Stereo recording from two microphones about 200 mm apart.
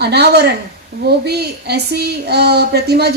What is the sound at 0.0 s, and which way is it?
A woman's voice, 55° right (ahead or behind).